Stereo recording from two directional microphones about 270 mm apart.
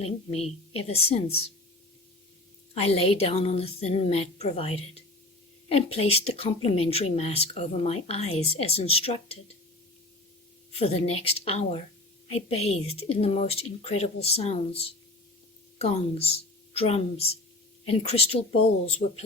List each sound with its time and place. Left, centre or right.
0.0 s speech: left
2.7 s speech: left
10.7 s speech: left
15.8 s speech: left